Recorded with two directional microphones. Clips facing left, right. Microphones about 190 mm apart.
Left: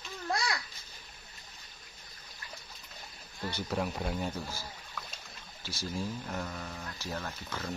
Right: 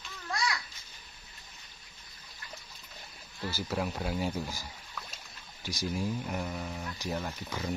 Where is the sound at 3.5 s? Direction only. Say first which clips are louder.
Even; 5° right (ahead or behind).